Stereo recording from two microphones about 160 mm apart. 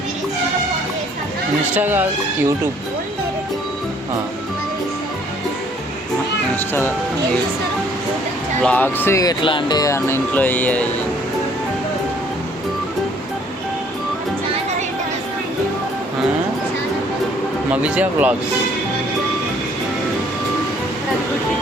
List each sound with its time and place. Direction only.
1.7 s speech: 10° right (ahead or behind)
6.6 s speech: 15° left (ahead or behind)
8.6 s speech: 10° left (ahead or behind)
9.4 s speech: 30° left (ahead or behind); by 10.8 s 10° left (ahead or behind)
17.7 s speech: 10° right (ahead or behind)